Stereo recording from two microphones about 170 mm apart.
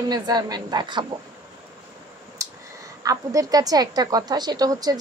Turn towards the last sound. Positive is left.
turn(degrees=-20)  # may be behind; listen again after turning